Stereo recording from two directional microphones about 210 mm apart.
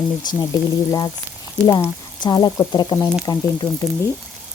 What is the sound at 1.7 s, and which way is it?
Speech, 20° left (ahead or behind).